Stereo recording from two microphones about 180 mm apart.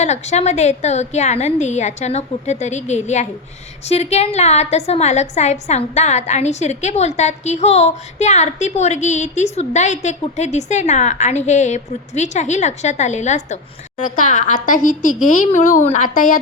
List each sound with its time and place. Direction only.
0.0 s a woman's voice: 40° left (ahead or behind)